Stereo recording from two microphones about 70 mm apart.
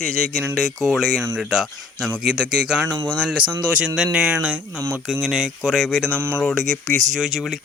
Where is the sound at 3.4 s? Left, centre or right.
Right.